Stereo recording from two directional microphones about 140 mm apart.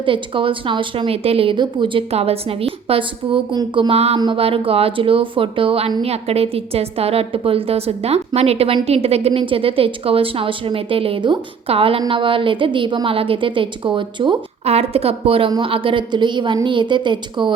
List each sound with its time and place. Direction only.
0.0 s a woman's voice: 40° right (ahead or behind)